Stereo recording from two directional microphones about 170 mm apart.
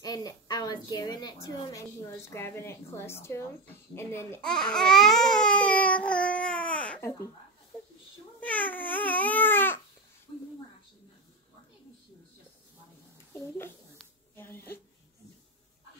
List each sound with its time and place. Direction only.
0.0 s a woman's voice: 20° left (ahead or behind)
4.5 s babbling: 5° left (ahead or behind)
8.4 s baby cry: 10° left (ahead or behind)
13.3 s a sound: 15° left (ahead or behind)